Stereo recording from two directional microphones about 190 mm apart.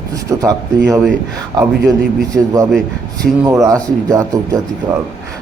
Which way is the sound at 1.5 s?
20° right (ahead or behind).